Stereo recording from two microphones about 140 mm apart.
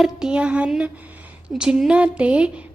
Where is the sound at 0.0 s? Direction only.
5° right (ahead or behind).